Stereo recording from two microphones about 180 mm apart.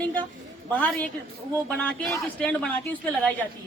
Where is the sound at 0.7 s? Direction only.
10° left (ahead or behind).